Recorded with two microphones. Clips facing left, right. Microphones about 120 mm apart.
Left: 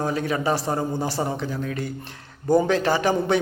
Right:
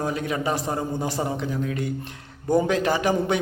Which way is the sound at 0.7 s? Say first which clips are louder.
Left 2 dB; 35° left (ahead or behind).